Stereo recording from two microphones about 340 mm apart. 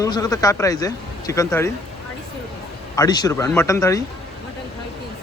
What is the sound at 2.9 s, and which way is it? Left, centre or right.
Speech, centre.